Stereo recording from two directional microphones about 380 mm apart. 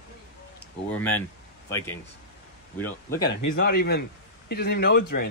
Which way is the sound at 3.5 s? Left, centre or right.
Left.